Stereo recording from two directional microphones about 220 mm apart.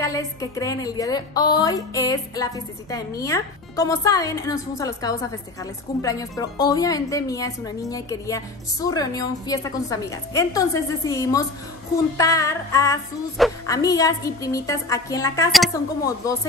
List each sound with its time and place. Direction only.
0.0 s a woman's voice: 15° left (ahead or behind)